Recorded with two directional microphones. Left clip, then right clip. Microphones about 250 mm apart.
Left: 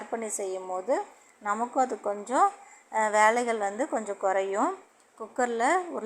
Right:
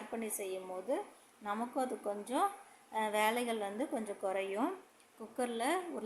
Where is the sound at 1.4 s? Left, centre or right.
Centre.